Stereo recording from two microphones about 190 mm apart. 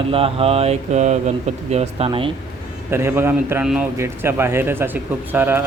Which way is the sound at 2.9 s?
10° right (ahead or behind).